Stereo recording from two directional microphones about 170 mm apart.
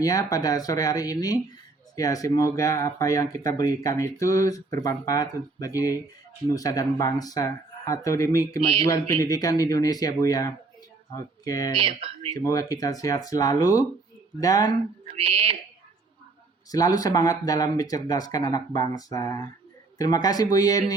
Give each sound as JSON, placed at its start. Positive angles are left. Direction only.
{"t": 0.0, "sound": "speech", "side_deg": 20}
{"t": 11.8, "sound": "speech", "side_deg": -35}
{"t": 12.3, "sound": "speech", "side_deg": 20}
{"t": 15.0, "sound": "speech", "side_deg": -35}
{"t": 16.7, "sound": "speech", "side_deg": 20}